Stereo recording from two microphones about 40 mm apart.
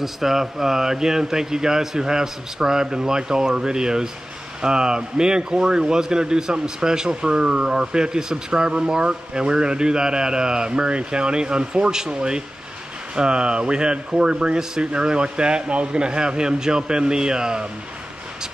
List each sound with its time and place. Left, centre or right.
0.0 s speech: centre